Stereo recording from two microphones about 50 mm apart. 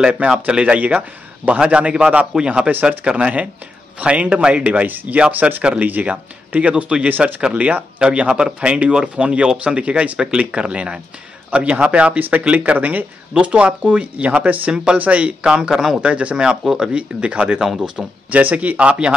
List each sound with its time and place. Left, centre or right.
0.0 s speech: right
2.7 s speech: right
4.0 s speech: right
7.4 s speech: right
13.3 s speech: right
16.0 s speech: right
18.3 s speech: right